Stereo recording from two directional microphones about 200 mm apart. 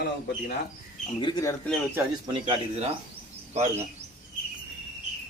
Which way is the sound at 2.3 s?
25° right (ahead or behind).